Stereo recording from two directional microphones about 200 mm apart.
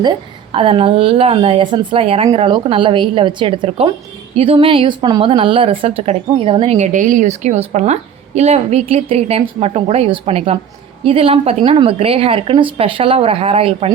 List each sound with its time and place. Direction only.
0.5 s a woman's voice: 25° right (ahead or behind)